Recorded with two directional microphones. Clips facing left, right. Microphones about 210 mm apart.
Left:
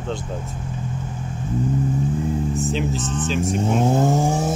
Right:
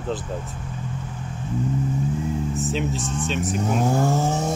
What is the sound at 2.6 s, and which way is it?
Speech, centre (ahead or behind).